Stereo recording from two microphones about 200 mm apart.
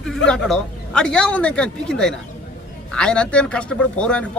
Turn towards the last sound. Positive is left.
turn(degrees=5)  # may be behind; listen again after turning